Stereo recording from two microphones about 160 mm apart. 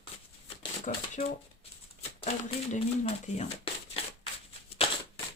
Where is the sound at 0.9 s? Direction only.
55° left (ahead or behind).